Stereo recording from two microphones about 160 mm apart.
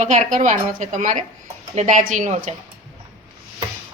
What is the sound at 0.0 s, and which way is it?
A woman's voice, 45° right (ahead or behind).